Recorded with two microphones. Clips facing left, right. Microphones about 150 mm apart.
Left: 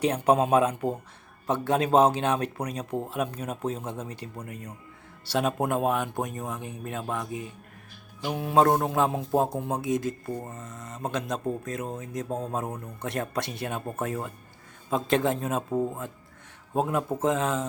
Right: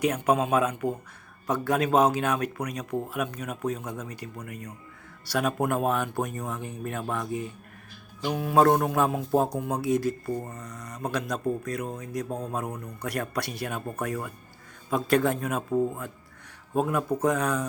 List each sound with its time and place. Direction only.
0.0 s speech: 30° left (ahead or behind)